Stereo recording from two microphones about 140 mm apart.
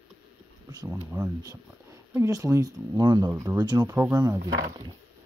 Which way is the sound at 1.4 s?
20° right (ahead or behind).